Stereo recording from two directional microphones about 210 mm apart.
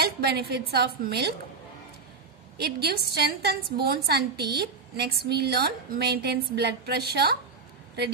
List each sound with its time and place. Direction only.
0.3 s a woman's voice: 50° right (ahead or behind)
2.5 s a woman's voice: 50° right (ahead or behind)